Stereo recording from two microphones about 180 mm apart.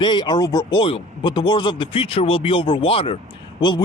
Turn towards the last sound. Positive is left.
turn(degrees=25)  # may be behind; listen again after turning